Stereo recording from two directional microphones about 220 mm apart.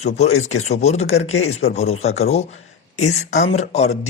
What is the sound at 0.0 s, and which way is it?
Speech, 30° left (ahead or behind).